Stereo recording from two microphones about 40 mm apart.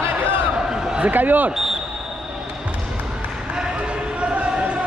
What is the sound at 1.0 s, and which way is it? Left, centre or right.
Speech, right.